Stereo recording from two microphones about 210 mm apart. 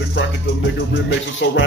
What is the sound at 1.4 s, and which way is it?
Speech, 60° left (ahead or behind).